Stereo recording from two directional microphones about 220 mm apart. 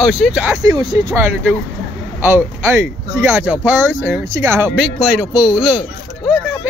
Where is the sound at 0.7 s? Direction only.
15° right (ahead or behind).